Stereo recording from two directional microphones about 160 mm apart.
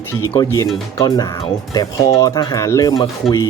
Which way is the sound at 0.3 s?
20° left (ahead or behind).